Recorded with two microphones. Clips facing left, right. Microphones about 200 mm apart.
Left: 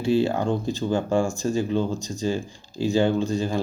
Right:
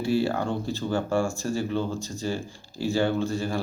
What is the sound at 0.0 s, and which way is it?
Speech, 20° left (ahead or behind).